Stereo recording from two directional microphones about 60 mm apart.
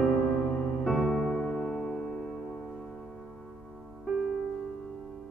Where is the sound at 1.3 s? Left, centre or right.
Centre.